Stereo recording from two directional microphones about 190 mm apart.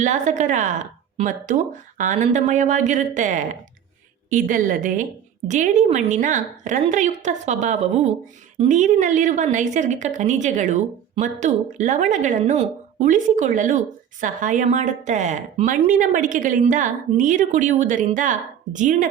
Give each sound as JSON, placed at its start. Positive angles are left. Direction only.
{"t": 0.0, "sound": "a woman's voice", "side_deg": -40}